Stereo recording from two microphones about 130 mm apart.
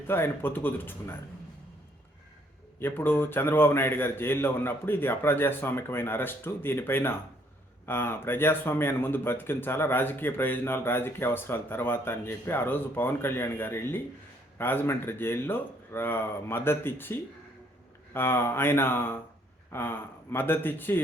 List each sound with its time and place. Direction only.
0.1 s speech: 15° left (ahead or behind)
2.7 s speech: 15° left (ahead or behind)